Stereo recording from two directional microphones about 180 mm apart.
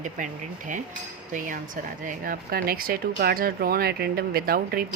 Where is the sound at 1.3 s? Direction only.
45° right (ahead or behind).